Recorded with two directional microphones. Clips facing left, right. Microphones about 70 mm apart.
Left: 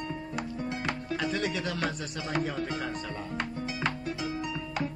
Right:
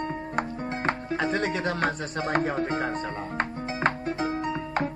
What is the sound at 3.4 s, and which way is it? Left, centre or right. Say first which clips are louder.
Music: right 6 dB; right.